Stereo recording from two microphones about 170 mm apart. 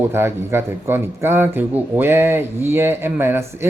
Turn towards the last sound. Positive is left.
turn(degrees=-15)  # may be behind; listen again after turning